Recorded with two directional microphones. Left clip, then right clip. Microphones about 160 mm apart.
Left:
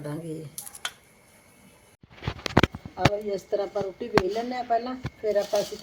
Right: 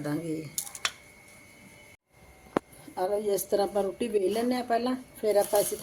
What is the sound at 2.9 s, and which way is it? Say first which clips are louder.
Speech: right 2 dB; 40° right (ahead or behind).